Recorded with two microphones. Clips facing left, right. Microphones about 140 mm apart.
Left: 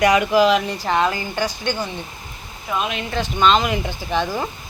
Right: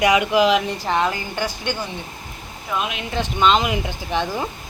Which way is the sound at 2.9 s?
15° right (ahead or behind).